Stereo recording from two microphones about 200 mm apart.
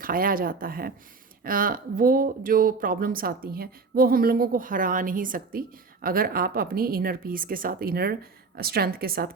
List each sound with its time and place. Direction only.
0.0 s speech: 45° right (ahead or behind)